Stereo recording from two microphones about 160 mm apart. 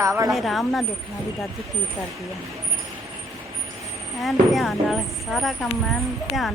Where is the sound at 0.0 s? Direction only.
20° right (ahead or behind).